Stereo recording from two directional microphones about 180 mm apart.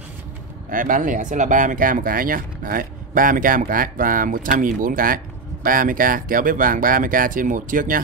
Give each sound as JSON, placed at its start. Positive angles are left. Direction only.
{"t": 0.7, "sound": "speech", "side_deg": -50}